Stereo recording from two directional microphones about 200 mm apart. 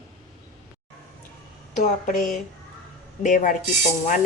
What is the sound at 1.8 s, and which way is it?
Speech, 40° left (ahead or behind).